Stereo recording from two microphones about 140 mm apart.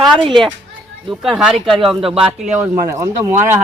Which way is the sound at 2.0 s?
40° right (ahead or behind).